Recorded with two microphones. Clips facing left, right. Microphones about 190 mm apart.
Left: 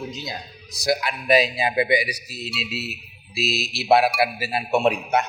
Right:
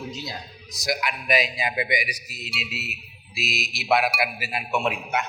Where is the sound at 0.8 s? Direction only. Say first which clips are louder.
Left 4 dB; 30° left (ahead or behind).